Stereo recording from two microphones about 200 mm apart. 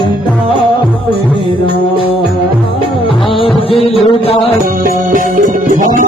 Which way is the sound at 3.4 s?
30° left (ahead or behind).